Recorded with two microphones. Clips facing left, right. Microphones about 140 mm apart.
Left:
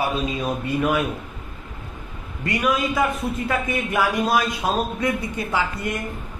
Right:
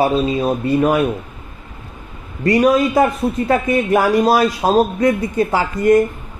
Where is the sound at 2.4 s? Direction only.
40° right (ahead or behind).